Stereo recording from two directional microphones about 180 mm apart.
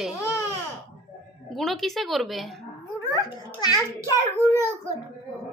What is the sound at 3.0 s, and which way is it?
Speech, 20° left (ahead or behind).